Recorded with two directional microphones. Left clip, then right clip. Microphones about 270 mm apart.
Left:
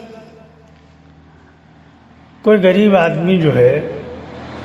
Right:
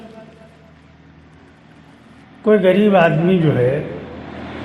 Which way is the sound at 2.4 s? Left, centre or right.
Left.